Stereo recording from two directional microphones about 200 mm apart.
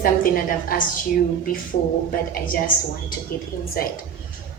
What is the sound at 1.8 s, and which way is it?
Speech, 40° left (ahead or behind).